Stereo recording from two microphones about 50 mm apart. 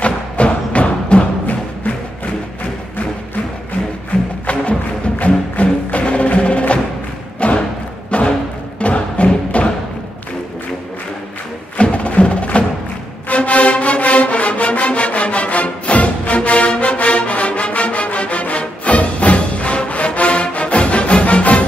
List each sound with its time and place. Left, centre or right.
0.0 s music: left
5.2 s music: left
11.7 s music: left